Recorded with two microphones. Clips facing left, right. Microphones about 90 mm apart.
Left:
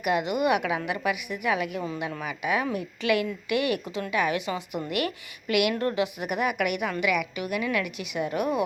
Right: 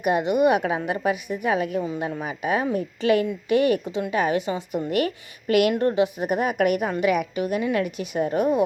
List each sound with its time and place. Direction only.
0.0 s a woman's voice: 30° right (ahead or behind)